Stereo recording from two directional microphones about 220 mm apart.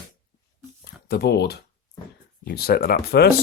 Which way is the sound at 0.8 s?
45° left (ahead or behind).